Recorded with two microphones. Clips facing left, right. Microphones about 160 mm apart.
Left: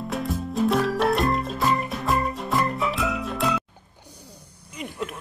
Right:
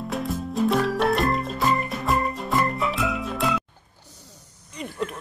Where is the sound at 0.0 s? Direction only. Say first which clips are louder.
Even; centre (ahead or behind).